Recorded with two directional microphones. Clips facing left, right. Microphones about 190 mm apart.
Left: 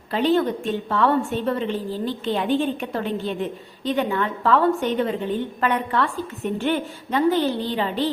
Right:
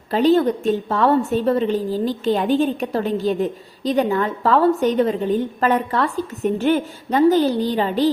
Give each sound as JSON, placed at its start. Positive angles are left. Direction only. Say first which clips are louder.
{"t": 0.1, "sound": "a woman's voice", "louder": "right 4 dB", "side_deg": -40}